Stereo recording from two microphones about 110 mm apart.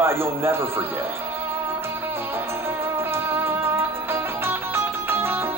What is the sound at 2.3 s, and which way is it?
Music, 20° right (ahead or behind).